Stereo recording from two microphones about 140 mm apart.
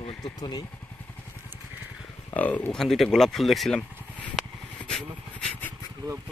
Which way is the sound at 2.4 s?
10° left (ahead or behind).